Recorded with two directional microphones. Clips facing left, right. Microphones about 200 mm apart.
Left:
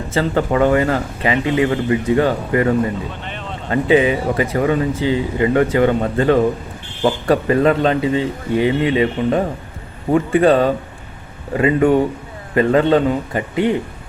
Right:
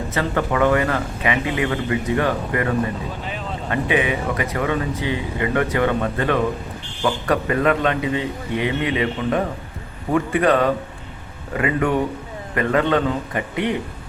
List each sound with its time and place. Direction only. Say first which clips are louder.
0.1 s speech: left 6 dB; 30° left (ahead or behind)
3.7 s speech: left 7 dB; 30° left (ahead or behind)